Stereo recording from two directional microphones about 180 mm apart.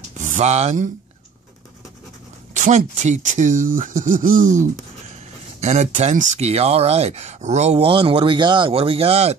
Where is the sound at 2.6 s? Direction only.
40° right (ahead or behind).